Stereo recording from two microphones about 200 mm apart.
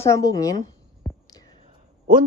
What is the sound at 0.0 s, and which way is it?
Speech, 15° left (ahead or behind).